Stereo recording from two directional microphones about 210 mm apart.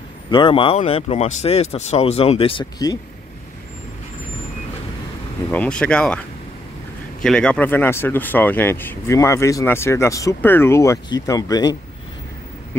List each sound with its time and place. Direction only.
0.3 s speech: 25° left (ahead or behind)
5.5 s speech: 5° left (ahead or behind)